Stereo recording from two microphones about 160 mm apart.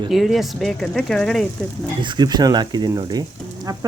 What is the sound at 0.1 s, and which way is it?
Speech, centre (ahead or behind).